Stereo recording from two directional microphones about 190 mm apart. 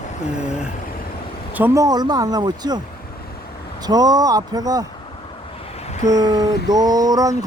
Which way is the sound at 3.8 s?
20° right (ahead or behind).